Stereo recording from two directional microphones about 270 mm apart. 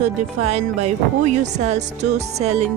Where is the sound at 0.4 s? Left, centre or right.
Right.